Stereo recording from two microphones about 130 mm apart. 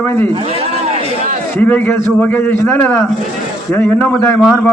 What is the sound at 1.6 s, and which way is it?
A man's voice, 15° left (ahead or behind).